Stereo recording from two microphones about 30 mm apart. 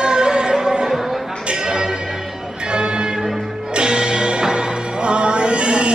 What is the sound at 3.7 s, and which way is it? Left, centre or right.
Music, right.